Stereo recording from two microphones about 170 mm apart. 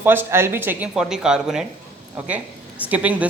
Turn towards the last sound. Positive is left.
turn(degrees=-10)  # may be behind; listen again after turning